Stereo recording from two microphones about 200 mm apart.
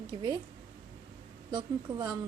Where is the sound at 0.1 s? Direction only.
20° right (ahead or behind).